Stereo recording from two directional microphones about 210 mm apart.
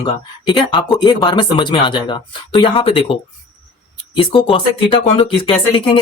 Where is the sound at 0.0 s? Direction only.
20° left (ahead or behind).